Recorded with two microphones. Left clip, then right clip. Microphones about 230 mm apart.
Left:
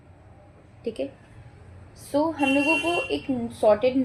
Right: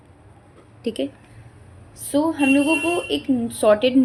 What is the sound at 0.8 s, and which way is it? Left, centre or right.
A woman's voice, right.